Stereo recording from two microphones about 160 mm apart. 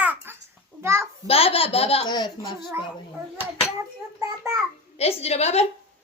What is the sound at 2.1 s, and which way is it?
Speech, 25° left (ahead or behind).